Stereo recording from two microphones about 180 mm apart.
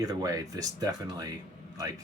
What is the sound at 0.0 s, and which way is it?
Speech, 20° right (ahead or behind).